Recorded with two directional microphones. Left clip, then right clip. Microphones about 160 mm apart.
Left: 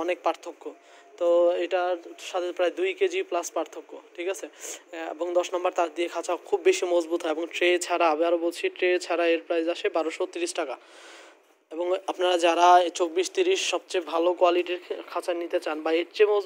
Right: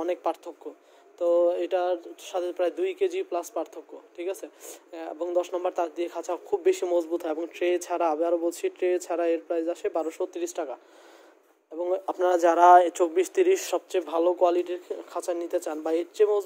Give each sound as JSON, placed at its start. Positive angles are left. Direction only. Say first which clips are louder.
{"t": 0.0, "sound": "speech", "louder": "left 2 dB", "side_deg": -15}
{"t": 1.7, "sound": "speech", "louder": "even", "side_deg": -25}
{"t": 12.2, "sound": "speech", "louder": "right 1 dB", "side_deg": -25}
{"t": 12.4, "sound": "speech", "louder": "right 2 dB", "side_deg": -10}
{"t": 13.5, "sound": "speech", "louder": "right 1 dB", "side_deg": -35}